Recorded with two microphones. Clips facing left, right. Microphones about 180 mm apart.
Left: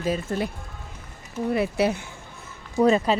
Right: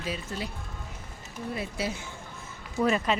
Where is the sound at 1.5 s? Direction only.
65° left (ahead or behind).